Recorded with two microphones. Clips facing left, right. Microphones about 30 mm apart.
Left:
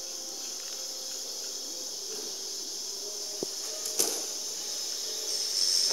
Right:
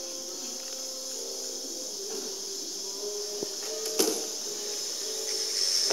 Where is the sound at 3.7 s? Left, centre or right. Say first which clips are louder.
Right 8 dB; centre.